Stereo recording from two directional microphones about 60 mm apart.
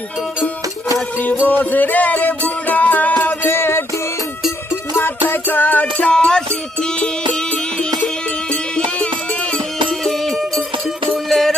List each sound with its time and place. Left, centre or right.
1.1 s music: left
3.5 s music: left
5.8 s music: centre
9.9 s music: centre